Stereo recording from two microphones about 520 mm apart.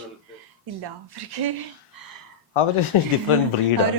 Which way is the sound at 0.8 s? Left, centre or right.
Right.